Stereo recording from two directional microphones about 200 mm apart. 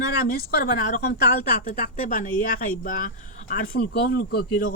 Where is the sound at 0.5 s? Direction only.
45° left (ahead or behind).